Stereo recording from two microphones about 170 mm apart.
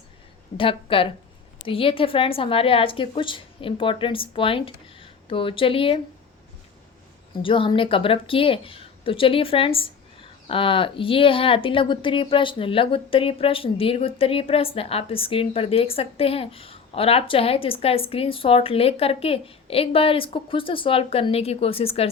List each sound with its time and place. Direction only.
0.5 s speech: 30° left (ahead or behind)
7.4 s speech: 30° left (ahead or behind)